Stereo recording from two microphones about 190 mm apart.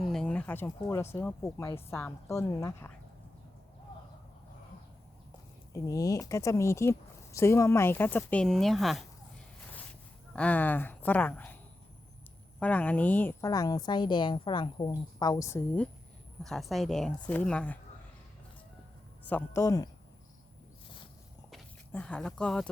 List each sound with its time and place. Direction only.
0.0 s a sound: 5° left (ahead or behind)
0.8 s a woman's voice: 15° left (ahead or behind)
5.7 s a woman's voice: 15° left (ahead or behind); by 9.0 s centre (ahead or behind)
10.3 s a woman's voice: 5° left (ahead or behind)
12.5 s a woman's voice: 5° left (ahead or behind)
16.4 s speech: centre (ahead or behind)
19.2 s a woman's voice: 10° left (ahead or behind)
21.5 s speech: 5° left (ahead or behind)